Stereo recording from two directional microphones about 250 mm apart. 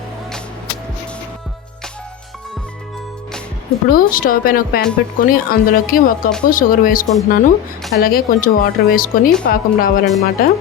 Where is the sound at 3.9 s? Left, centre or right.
Left.